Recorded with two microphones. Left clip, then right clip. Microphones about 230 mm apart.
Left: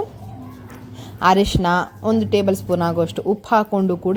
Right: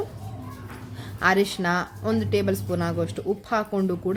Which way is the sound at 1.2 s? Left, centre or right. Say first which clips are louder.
Left 6 dB; centre.